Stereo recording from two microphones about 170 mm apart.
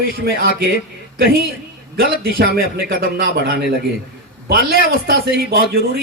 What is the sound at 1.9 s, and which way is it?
Speech, 60° right (ahead or behind).